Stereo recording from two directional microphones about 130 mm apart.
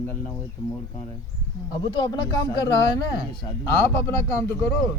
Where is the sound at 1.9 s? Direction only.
30° left (ahead or behind).